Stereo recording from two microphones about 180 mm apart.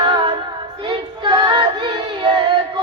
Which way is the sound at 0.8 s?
25° right (ahead or behind).